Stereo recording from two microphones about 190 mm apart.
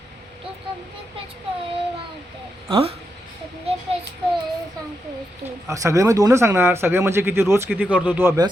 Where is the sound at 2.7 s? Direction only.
30° right (ahead or behind).